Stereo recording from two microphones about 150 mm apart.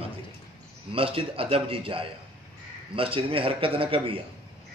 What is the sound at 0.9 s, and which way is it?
A man's voice, 35° right (ahead or behind).